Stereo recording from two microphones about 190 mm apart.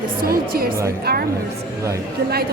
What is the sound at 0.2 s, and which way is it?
Speech, 50° right (ahead or behind).